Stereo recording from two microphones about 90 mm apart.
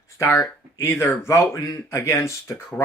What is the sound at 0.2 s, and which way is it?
A man's voice, 30° left (ahead or behind).